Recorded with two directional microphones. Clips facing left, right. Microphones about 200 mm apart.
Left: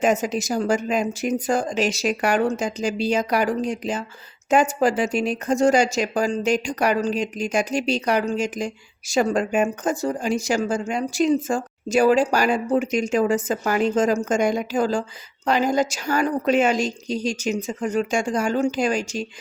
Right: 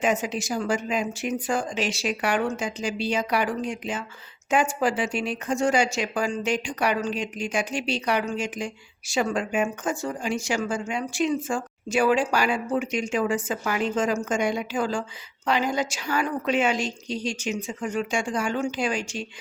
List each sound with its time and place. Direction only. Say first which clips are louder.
0.0 s speech: left 4 dB; 40° left (ahead or behind)